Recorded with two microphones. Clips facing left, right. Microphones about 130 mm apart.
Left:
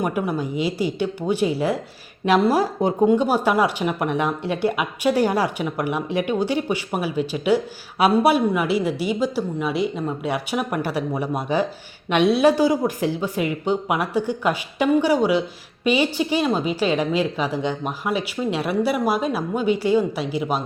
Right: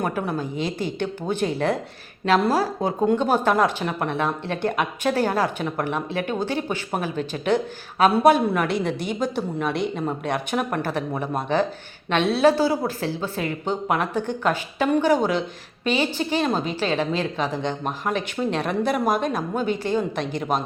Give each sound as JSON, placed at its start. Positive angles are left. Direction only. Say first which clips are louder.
{"t": 0.0, "sound": "speech", "louder": "left 2 dB", "side_deg": 10}